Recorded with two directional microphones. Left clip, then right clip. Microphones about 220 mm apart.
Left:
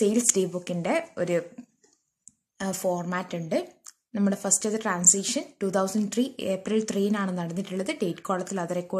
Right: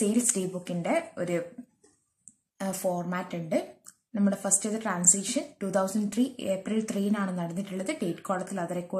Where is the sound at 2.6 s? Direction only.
35° left (ahead or behind).